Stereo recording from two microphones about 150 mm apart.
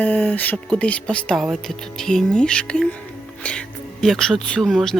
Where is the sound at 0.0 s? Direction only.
10° left (ahead or behind).